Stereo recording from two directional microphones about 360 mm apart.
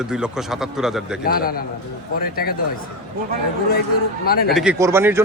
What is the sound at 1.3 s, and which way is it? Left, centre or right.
A man's voice, left.